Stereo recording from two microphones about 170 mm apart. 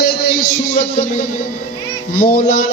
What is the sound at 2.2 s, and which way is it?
Speech, 60° left (ahead or behind).